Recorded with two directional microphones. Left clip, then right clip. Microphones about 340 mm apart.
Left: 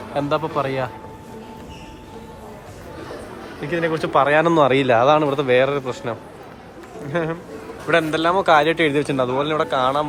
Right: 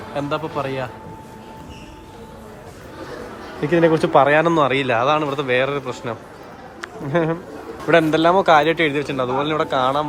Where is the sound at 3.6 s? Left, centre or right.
Centre.